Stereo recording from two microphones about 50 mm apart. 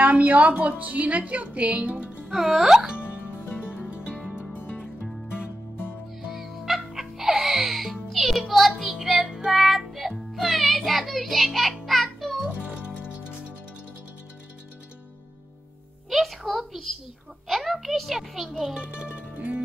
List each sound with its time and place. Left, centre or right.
0.0 s a woman's voice: right
2.3 s speech: centre
3.4 s music: left
3.7 s music: right
4.6 s music: left
6.3 s music: centre
12.4 s music: right
16.1 s a sound: centre
18.8 s music: right